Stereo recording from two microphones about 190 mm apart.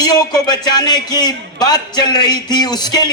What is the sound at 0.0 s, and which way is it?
A man's voice, 20° left (ahead or behind).